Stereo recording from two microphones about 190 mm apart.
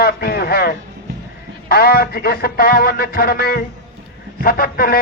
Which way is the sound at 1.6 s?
55° left (ahead or behind).